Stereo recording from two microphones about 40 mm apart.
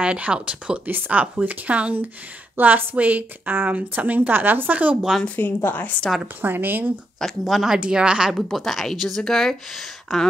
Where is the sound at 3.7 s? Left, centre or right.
Right.